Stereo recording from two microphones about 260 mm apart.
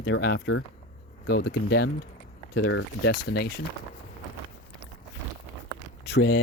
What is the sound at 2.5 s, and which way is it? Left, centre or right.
Speech, left.